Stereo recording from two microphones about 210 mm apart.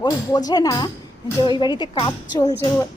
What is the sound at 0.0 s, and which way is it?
A woman's voice, 20° left (ahead or behind).